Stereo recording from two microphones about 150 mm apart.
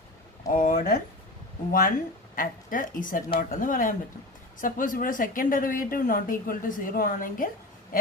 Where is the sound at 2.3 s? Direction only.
65° left (ahead or behind).